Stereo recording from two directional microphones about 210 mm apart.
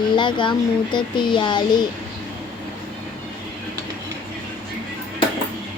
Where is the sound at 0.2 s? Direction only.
20° left (ahead or behind).